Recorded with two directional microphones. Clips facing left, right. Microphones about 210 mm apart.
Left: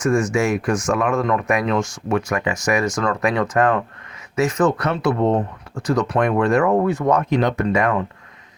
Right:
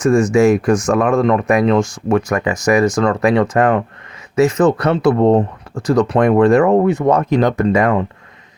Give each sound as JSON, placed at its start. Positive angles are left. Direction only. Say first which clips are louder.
{"t": 0.0, "sound": "speech", "louder": "right 7 dB", "side_deg": -30}